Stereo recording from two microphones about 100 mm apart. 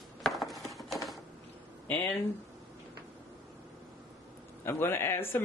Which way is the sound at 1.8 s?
20° left (ahead or behind).